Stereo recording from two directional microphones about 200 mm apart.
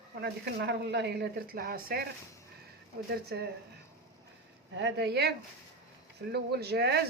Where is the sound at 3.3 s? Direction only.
55° right (ahead or behind).